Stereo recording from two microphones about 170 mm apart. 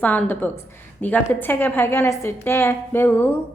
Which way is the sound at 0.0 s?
10° left (ahead or behind).